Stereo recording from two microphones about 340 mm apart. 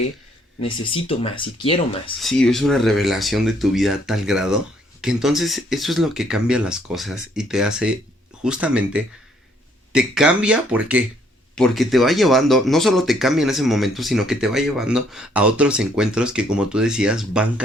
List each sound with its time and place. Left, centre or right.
0.6 s speech: centre
2.2 s a man's voice: centre